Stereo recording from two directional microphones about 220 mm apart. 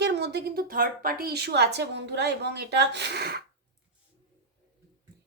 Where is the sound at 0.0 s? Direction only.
50° right (ahead or behind).